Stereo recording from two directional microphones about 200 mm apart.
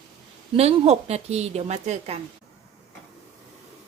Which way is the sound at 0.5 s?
30° right (ahead or behind).